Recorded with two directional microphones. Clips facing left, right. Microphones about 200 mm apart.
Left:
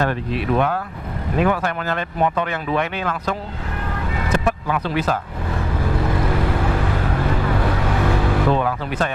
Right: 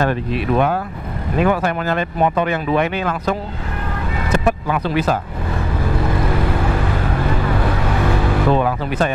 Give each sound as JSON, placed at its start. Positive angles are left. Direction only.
{"t": 0.0, "sound": "speech", "side_deg": -10}
{"t": 5.8, "sound": "vehicle", "side_deg": -20}